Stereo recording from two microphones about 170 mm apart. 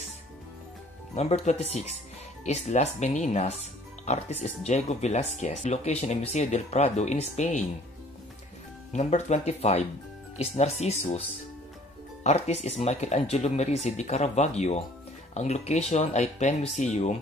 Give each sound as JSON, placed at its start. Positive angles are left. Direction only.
{"t": 1.1, "sound": "speech", "side_deg": 40}
{"t": 8.9, "sound": "speech", "side_deg": 40}
{"t": 12.2, "sound": "speech", "side_deg": 40}